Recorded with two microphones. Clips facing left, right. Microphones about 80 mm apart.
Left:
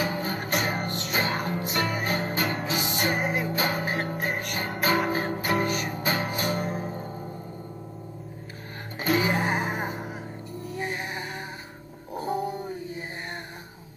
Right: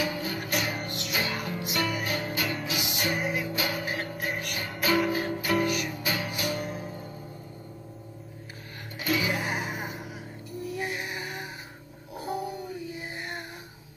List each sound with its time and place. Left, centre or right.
0.0 s music: left
9.0 s music: left
12.4 s dog: left